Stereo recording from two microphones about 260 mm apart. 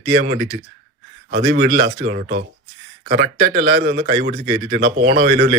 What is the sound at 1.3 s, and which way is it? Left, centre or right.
Speech, right.